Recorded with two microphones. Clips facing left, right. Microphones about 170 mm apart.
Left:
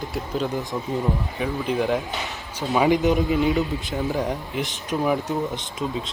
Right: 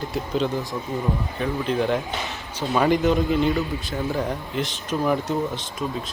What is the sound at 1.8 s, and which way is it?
Speech, centre (ahead or behind).